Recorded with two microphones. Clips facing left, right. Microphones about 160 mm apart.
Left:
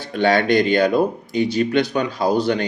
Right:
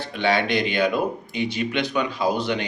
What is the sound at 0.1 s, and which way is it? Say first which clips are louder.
Speech: left 6 dB; 45° left (ahead or behind).